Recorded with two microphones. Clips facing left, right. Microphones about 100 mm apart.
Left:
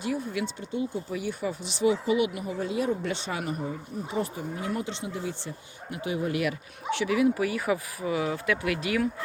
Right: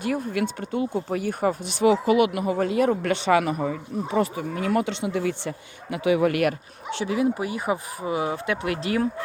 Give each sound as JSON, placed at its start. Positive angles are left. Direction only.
{"t": 0.0, "sound": "speech", "side_deg": -55}
{"t": 6.9, "sound": "speech", "side_deg": -30}